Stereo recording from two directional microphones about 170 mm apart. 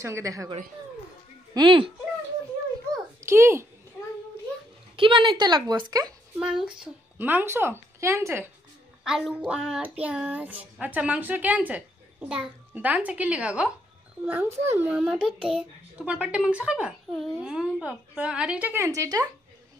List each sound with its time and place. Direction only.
0.0 s a child's voice: 20° right (ahead or behind)
1.5 s a woman's voice: 25° right (ahead or behind)
2.9 s a sound: 15° right (ahead or behind)
4.9 s a woman's voice: 30° right (ahead or behind)
6.4 s a child's voice: 5° right (ahead or behind)
9.0 s a child's voice: 5° right (ahead or behind); by 19.2 s 20° right (ahead or behind)